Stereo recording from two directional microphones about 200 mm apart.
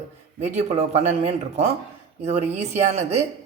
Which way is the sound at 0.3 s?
35° right (ahead or behind).